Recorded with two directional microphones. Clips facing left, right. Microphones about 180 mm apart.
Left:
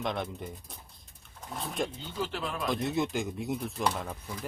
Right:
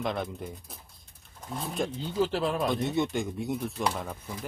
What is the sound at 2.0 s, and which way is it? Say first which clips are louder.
Speech: right 7 dB; 35° right (ahead or behind).